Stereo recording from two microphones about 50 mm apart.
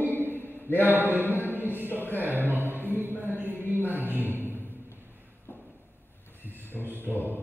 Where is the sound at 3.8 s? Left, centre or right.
Right.